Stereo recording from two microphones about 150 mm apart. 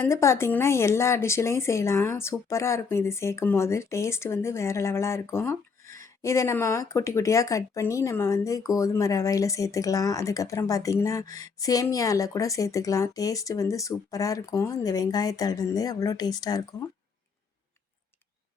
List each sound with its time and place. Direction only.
0.0 s speech: 20° left (ahead or behind)